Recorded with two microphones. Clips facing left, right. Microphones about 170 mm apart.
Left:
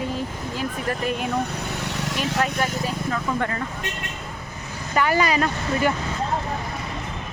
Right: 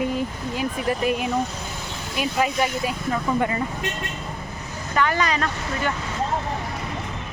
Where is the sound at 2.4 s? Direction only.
10° right (ahead or behind).